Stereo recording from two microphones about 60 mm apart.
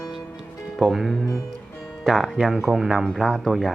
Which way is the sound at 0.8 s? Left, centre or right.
Centre.